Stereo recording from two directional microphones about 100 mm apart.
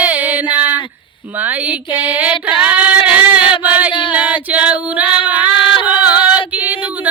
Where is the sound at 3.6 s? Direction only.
15° right (ahead or behind).